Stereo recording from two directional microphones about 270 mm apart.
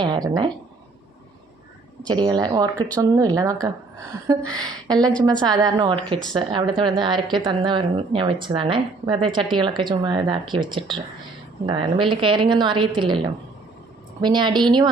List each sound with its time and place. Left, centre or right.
0.0 s speech: centre
2.0 s speech: centre
14.2 s speech: centre